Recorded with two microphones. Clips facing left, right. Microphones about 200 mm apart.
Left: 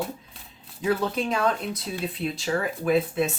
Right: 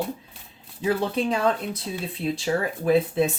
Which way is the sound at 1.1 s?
30° right (ahead or behind).